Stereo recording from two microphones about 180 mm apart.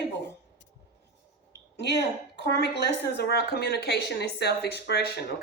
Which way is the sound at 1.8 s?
70° left (ahead or behind).